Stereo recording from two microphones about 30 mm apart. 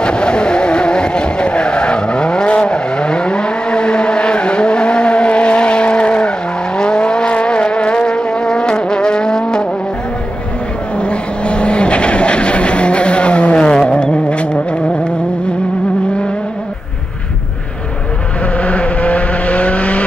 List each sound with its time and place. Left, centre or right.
0.0 s vehicle: left
2.7 s vehicle: left
7.3 s music: left
11.0 s vehicle: left
13.6 s vehicle: left
18.6 s vehicle: left